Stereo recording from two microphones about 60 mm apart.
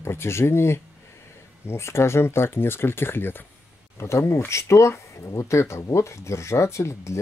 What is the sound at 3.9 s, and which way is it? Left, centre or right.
Speech, left.